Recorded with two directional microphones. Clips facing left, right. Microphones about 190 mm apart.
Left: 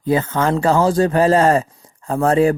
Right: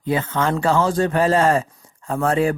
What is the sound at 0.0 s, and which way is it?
A man's voice, 40° left (ahead or behind).